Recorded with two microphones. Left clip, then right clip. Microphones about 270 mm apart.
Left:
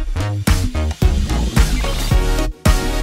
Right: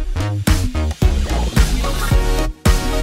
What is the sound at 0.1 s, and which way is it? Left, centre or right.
Music, centre.